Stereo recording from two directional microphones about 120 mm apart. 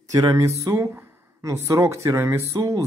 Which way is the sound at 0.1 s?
25° right (ahead or behind).